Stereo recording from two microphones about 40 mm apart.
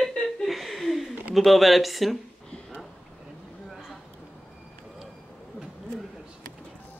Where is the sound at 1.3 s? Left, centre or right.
Centre.